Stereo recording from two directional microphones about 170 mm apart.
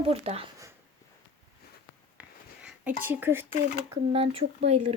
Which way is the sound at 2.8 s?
10° right (ahead or behind).